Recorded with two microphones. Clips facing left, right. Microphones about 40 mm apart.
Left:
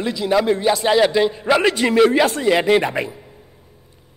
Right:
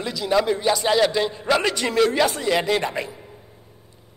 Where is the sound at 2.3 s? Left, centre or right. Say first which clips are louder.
Left 6 dB; left.